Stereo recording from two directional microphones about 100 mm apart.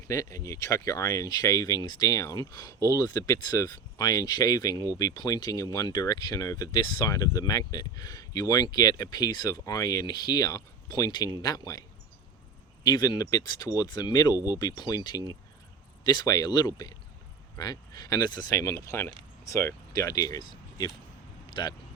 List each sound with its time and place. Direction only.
0.1 s speech: 30° left (ahead or behind)
20.5 s a sound: 45° left (ahead or behind)
21.5 s speech: 50° left (ahead or behind)